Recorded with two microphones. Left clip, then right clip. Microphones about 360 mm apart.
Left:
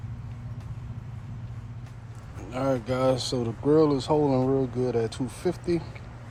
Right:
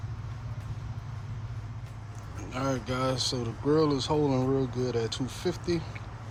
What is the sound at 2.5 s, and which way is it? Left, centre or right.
Speech, centre.